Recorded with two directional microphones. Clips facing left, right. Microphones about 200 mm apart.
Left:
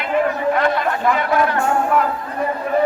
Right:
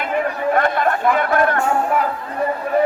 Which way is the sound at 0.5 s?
50° right (ahead or behind).